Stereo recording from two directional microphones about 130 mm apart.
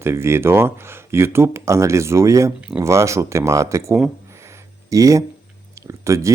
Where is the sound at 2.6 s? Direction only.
10° right (ahead or behind).